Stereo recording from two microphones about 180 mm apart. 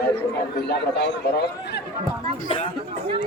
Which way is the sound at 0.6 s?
75° left (ahead or behind).